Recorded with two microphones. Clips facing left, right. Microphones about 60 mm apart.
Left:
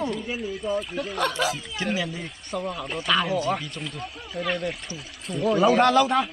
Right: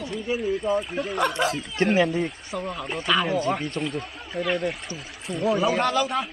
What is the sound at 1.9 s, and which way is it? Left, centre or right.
Speech, right.